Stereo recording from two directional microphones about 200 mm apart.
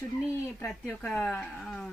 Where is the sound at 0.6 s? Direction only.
5° left (ahead or behind).